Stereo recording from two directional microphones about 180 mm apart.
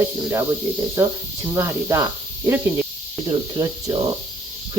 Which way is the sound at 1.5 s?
15° right (ahead or behind).